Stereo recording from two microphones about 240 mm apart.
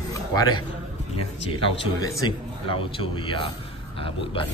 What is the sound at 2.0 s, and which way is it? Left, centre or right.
A man's voice, centre.